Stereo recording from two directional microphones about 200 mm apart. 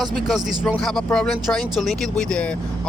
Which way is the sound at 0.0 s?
Centre (ahead or behind).